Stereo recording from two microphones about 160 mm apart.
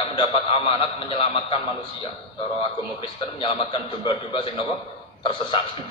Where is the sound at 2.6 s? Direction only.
35° left (ahead or behind).